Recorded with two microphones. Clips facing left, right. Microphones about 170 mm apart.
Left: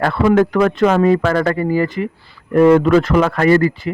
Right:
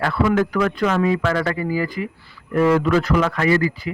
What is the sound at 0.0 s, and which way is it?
Speech, 45° left (ahead or behind).